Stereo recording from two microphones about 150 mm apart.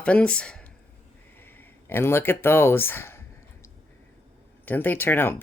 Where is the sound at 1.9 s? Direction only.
15° left (ahead or behind).